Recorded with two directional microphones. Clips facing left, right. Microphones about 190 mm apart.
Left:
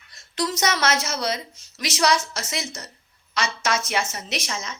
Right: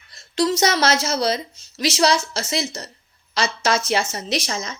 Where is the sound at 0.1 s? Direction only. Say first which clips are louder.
Right 6 dB; 30° right (ahead or behind).